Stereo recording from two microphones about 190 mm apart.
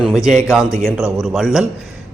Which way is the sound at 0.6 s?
15° left (ahead or behind).